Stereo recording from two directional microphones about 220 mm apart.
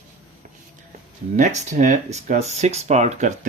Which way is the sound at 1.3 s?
35° right (ahead or behind).